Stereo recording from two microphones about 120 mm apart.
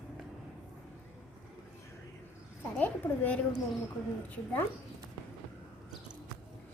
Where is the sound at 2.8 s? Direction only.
15° left (ahead or behind).